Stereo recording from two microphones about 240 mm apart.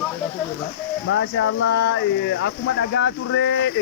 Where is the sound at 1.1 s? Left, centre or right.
Left.